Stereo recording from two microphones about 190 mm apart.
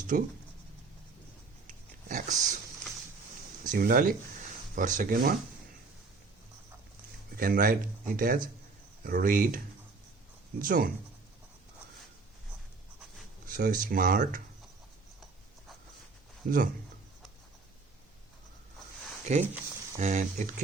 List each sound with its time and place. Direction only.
0.1 s speech: 45° right (ahead or behind)
1.6 s pig: 40° right (ahead or behind)
3.6 s speech: 45° right (ahead or behind)
7.3 s speech: 50° right (ahead or behind)
10.6 s speech: 50° right (ahead or behind)
13.5 s speech: 45° right (ahead or behind)
16.4 s speech: 45° right (ahead or behind)
19.3 s speech: 35° right (ahead or behind)